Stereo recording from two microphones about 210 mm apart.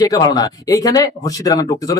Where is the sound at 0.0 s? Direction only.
15° left (ahead or behind).